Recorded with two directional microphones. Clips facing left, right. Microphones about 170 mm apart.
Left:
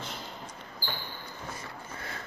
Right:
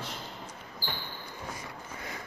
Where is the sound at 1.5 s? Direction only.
15° right (ahead or behind).